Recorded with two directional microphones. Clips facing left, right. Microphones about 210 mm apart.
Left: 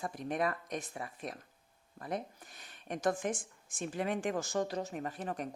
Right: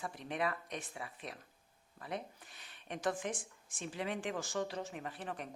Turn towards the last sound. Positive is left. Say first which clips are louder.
# left 5 dB
turn(degrees=40)  # may be behind; listen again after turning